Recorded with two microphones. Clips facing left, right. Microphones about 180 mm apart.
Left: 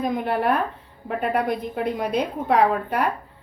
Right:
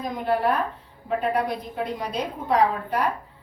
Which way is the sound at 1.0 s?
55° left (ahead or behind).